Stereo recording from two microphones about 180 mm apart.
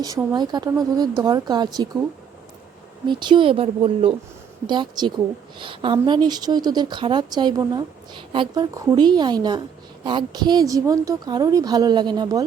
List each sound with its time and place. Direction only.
0.3 s speech: 25° right (ahead or behind)
3.1 s speech: 25° right (ahead or behind)